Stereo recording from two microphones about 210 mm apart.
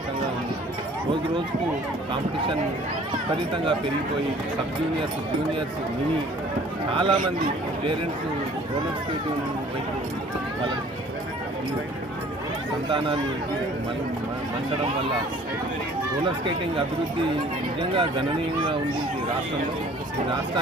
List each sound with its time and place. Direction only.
3.1 s speech: 25° right (ahead or behind)
6.9 s speech: 25° right (ahead or behind)
17.7 s speech: 25° right (ahead or behind)